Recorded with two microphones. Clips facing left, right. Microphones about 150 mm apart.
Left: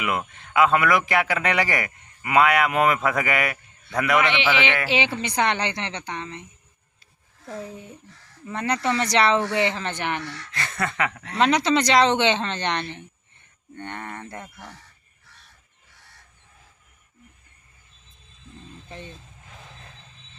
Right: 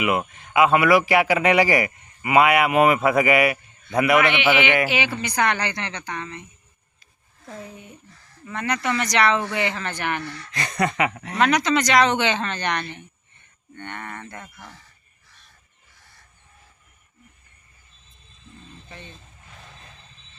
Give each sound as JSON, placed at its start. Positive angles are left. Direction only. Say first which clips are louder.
{"t": 0.0, "sound": "speech", "louder": "right 4 dB", "side_deg": -10}
{"t": 4.9, "sound": "speech", "louder": "left 1 dB", "side_deg": 30}
{"t": 7.4, "sound": "speech", "louder": "left 3 dB", "side_deg": 30}
{"t": 10.2, "sound": "speech", "louder": "right 1 dB", "side_deg": -15}
{"t": 11.3, "sound": "speech", "louder": "even", "side_deg": 25}